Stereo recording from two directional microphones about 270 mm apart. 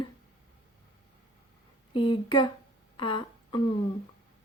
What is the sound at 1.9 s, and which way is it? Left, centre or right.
Speech, centre.